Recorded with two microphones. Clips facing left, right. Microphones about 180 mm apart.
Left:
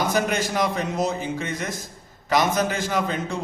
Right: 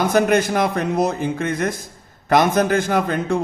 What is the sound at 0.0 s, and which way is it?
A man's voice, 55° right (ahead or behind).